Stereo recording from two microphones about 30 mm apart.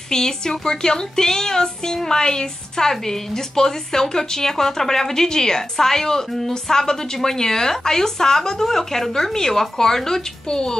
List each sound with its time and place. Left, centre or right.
0.1 s a woman's voice: left
10.5 s a woman's voice: left